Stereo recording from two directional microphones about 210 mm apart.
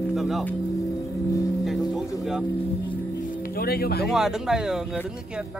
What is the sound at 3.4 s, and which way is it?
Speech, 45° left (ahead or behind).